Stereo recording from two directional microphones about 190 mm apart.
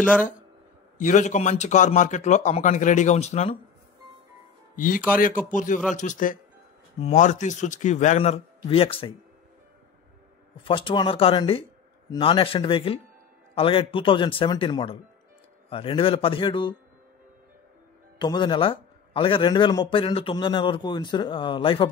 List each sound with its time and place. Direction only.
0.9 s a man's voice: 40° left (ahead or behind)
4.7 s a man's voice: 45° left (ahead or behind); by 9.1 s 30° left (ahead or behind)
10.6 s a man's voice: 25° left (ahead or behind)
18.2 s a man's voice: 25° left (ahead or behind)